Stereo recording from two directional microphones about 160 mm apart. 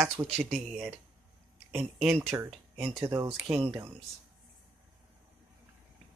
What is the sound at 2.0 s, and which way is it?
Speech, 5° right (ahead or behind).